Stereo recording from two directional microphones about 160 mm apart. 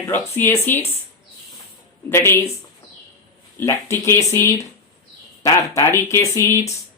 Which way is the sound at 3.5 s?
15° left (ahead or behind).